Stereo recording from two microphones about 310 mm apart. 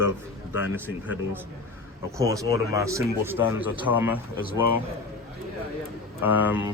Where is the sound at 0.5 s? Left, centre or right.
Centre.